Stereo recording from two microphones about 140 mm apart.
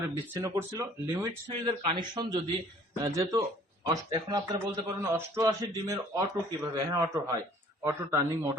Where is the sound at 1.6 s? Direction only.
35° right (ahead or behind).